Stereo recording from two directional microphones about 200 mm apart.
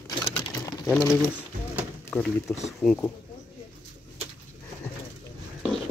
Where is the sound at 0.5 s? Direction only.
20° left (ahead or behind).